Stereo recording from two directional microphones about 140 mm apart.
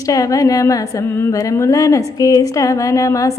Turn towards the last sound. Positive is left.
turn(degrees=25)  # may be behind; listen again after turning